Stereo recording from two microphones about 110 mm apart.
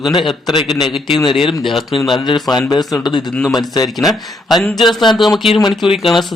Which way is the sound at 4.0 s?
Centre (ahead or behind).